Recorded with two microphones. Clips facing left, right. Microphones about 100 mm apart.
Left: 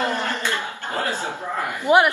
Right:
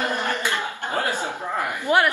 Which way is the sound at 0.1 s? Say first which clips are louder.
Even; 15° right (ahead or behind).